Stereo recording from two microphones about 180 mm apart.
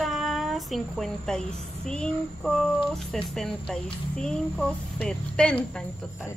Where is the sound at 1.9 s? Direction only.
5° left (ahead or behind).